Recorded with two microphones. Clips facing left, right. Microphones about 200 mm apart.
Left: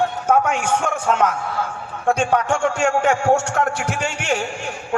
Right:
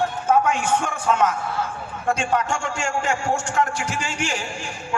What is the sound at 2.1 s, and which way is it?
A man's voice, 60° left (ahead or behind).